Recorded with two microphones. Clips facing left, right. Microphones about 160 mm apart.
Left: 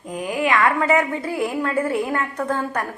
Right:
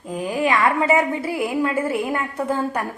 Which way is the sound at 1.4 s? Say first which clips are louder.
Even; 10° right (ahead or behind).